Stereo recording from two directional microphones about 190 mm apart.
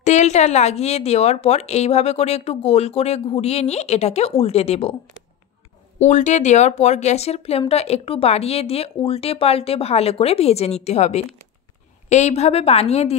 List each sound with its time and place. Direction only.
0.0 s speech: 40° left (ahead or behind)
6.0 s speech: 40° left (ahead or behind)